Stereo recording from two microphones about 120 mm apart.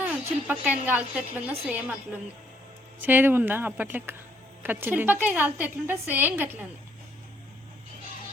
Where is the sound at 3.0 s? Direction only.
15° right (ahead or behind).